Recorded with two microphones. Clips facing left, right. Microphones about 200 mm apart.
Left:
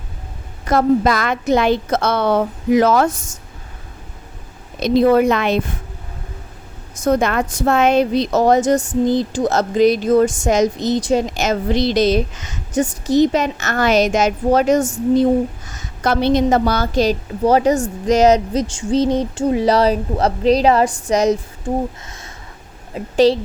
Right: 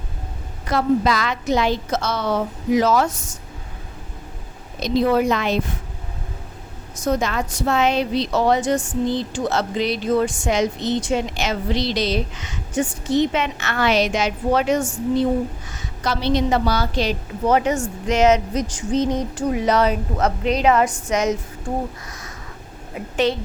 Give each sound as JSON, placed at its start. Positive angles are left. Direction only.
{"t": 0.7, "sound": "a woman's voice", "side_deg": 50}
{"t": 4.8, "sound": "a woman's voice", "side_deg": 55}
{"t": 7.0, "sound": "speech", "side_deg": 55}
{"t": 23.0, "sound": "speech", "side_deg": 30}